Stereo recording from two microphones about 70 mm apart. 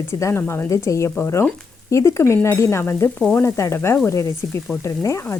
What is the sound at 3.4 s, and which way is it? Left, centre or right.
Frying, left.